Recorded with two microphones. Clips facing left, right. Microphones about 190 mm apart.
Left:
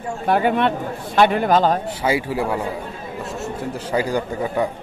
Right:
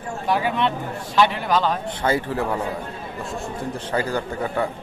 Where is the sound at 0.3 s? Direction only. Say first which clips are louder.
Left 4 dB; 55° left (ahead or behind).